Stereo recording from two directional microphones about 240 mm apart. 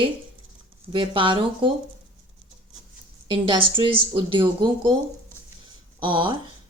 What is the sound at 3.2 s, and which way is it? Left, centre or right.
A woman's voice, right.